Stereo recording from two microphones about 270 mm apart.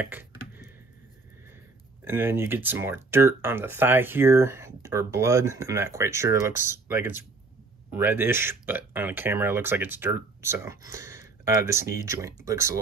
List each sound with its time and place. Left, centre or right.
0.0 s computer keyboard: centre
2.0 s speech: centre